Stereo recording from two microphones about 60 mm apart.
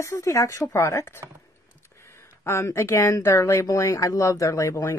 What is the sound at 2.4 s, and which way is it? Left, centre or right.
Speech, left.